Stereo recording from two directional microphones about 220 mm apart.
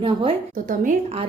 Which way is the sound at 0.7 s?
40° right (ahead or behind).